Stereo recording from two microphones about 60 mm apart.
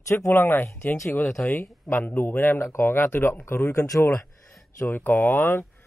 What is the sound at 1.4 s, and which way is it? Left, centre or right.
A man's voice, left.